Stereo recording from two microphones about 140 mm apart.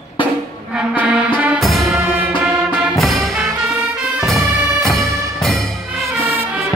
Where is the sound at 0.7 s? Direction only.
10° right (ahead or behind).